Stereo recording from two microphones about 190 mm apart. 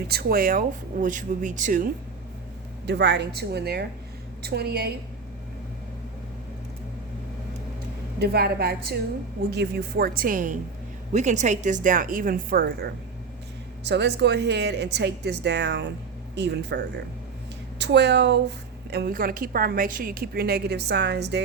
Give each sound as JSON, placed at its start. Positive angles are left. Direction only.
{"t": 0.1, "sound": "speech", "side_deg": -55}
{"t": 2.8, "sound": "a woman's voice", "side_deg": -65}
{"t": 8.2, "sound": "a woman's voice", "side_deg": -55}